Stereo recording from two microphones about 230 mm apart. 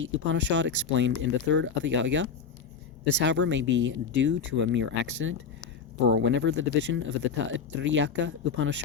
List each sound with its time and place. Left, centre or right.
0.0 s speech: right